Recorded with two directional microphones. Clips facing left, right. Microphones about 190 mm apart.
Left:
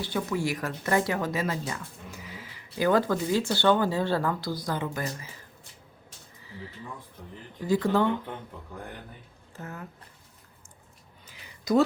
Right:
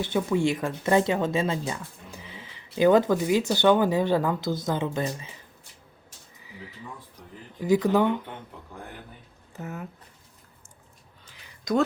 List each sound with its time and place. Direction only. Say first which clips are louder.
0.0 s speech: right 5 dB; 25° right (ahead or behind)
7.6 s speech: right 3 dB; 15° right (ahead or behind)
9.5 s speech: right 4 dB; 20° right (ahead or behind)
11.7 s a woman's voice: left 2 dB; 5° left (ahead or behind)